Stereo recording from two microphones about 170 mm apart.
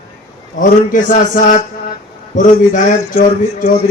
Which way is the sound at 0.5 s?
50° left (ahead or behind).